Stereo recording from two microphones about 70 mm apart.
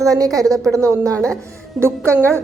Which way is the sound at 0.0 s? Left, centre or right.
Right.